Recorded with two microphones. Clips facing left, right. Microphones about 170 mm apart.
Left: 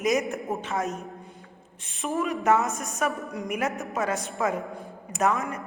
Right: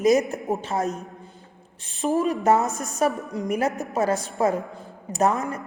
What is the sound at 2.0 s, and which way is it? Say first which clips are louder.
A woman's voice: right 5 dB; 35° right (ahead or behind).